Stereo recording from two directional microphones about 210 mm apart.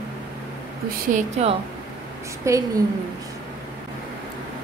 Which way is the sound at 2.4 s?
15° right (ahead or behind).